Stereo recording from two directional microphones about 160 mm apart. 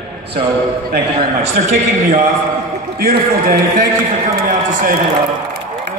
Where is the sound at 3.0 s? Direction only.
65° right (ahead or behind).